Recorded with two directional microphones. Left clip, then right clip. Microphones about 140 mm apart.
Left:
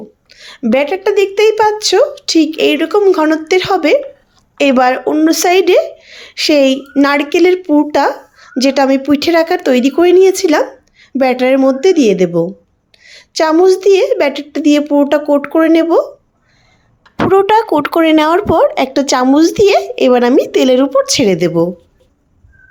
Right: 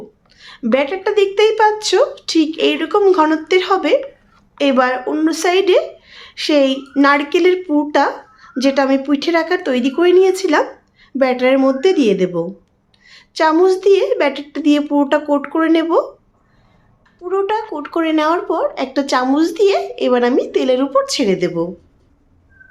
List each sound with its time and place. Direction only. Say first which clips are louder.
0.3 s a sound: left 5 dB; 40° left (ahead or behind)
0.7 s a woman's voice: left 4 dB; 35° left (ahead or behind)
11.5 s a woman's voice: left 4 dB; 30° left (ahead or behind)
17.2 s speech: left 9 dB; 70° left (ahead or behind); by 21.7 s 50° left (ahead or behind)